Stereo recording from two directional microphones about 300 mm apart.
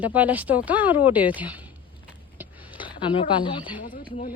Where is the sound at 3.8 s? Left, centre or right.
Left.